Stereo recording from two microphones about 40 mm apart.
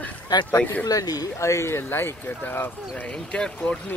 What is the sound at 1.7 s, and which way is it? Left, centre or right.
Speech, left.